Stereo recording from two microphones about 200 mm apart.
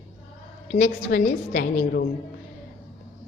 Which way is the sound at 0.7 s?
35° left (ahead or behind).